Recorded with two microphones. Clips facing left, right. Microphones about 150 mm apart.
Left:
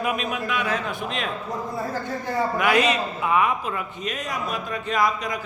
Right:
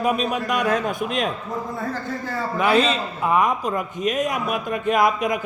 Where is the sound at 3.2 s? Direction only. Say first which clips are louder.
Right 3 dB; 40° right (ahead or behind).